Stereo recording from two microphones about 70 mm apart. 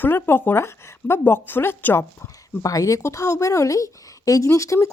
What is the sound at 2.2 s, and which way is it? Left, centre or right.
Speech, left.